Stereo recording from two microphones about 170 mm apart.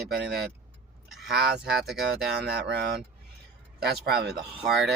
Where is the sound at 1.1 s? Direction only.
Centre (ahead or behind).